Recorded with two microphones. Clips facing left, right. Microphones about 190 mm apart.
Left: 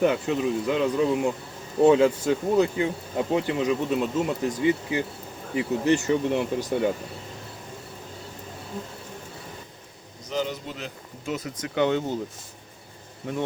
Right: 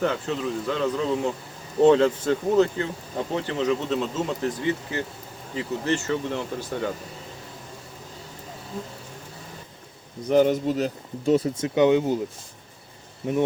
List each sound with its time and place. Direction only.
0.0 s speech: 15° left (ahead or behind)
10.2 s speech: 55° right (ahead or behind); by 12.1 s 15° right (ahead or behind)